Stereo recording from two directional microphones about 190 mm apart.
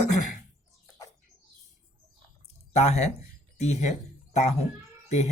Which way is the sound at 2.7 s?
35° left (ahead or behind).